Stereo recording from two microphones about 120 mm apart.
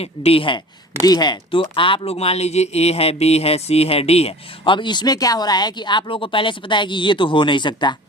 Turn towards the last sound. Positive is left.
turn(degrees=40)  # may be behind; listen again after turning